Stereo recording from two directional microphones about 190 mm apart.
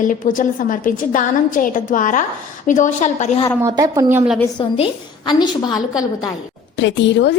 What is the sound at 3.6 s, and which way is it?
Speech, 15° right (ahead or behind).